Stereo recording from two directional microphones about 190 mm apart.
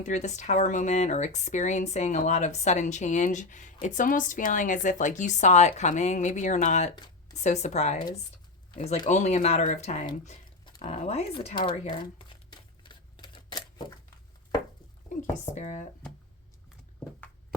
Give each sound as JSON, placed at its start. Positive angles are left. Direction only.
{"t": 0.0, "sound": "speech", "side_deg": 40}
{"t": 10.8, "sound": "crumpling", "side_deg": 35}
{"t": 15.1, "sound": "a sound", "side_deg": 40}
{"t": 15.5, "sound": "speech", "side_deg": 40}